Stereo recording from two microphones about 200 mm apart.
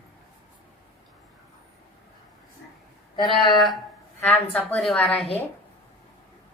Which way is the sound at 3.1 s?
25° left (ahead or behind).